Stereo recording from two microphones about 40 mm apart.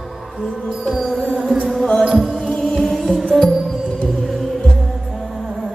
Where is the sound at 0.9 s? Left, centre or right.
Centre.